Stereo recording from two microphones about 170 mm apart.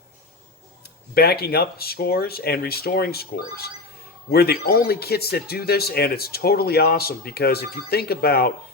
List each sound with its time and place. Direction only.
1.1 s speech: 65° left (ahead or behind)